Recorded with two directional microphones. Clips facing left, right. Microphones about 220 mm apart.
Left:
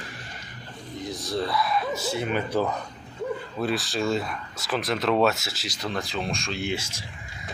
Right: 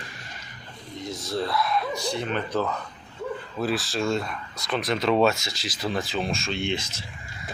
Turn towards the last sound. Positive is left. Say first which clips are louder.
# right 1 dB
turn(degrees=10)  # may be behind; listen again after turning